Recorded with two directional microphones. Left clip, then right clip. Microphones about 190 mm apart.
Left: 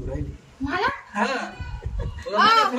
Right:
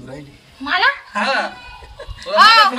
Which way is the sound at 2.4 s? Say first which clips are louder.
Right 8 dB; 20° right (ahead or behind).